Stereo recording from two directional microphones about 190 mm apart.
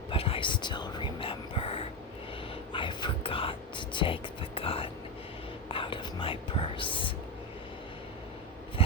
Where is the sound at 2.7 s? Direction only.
25° left (ahead or behind).